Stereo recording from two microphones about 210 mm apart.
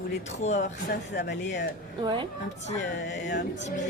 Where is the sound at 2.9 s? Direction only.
55° left (ahead or behind).